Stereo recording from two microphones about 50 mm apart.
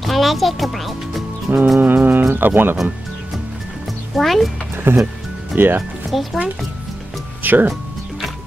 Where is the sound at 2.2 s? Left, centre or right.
Right.